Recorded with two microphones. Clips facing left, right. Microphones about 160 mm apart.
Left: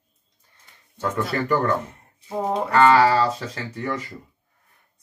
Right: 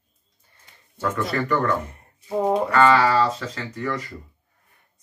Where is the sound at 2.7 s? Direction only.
30° left (ahead or behind).